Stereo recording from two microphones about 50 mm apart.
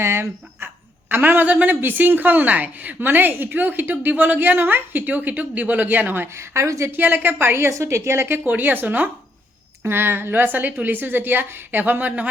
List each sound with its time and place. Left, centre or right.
0.0 s speech: right
1.0 s a woman's voice: right
6.3 s a woman's voice: right
6.9 s a woman's voice: right
7.7 s a woman's voice: right
8.3 s a woman's voice: right
9.8 s a woman's voice: right